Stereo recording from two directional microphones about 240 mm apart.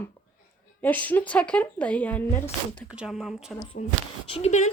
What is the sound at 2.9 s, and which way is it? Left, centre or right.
Speech, centre.